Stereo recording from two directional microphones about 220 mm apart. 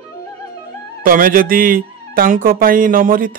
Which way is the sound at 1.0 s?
40° right (ahead or behind).